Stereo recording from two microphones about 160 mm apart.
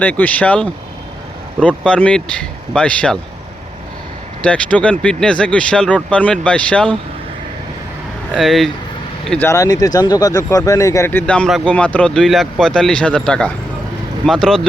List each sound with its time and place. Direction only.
0.0 s speech: 10° left (ahead or behind)
4.4 s speech: 5° left (ahead or behind)
8.3 s speech: centre (ahead or behind)
9.5 s speech: 20° left (ahead or behind); by 14.6 s 5° left (ahead or behind)